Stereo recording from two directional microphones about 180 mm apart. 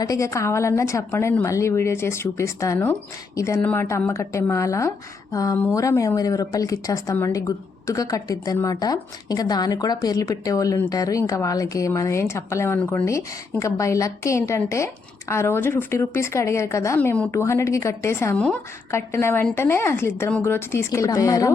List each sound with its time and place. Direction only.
0.0 s a woman's voice: 20° left (ahead or behind)